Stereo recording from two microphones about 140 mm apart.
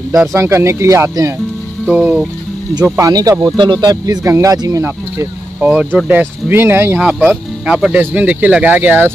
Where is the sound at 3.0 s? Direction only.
25° right (ahead or behind).